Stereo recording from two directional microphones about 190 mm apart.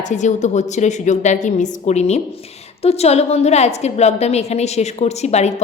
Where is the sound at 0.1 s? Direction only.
40° left (ahead or behind).